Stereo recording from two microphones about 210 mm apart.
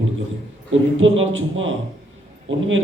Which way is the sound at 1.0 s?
65° right (ahead or behind).